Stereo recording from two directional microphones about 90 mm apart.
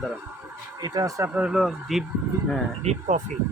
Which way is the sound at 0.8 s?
45° right (ahead or behind).